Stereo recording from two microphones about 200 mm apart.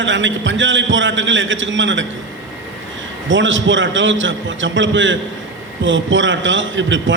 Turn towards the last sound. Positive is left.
turn(degrees=-70)  # may be behind; listen again after turning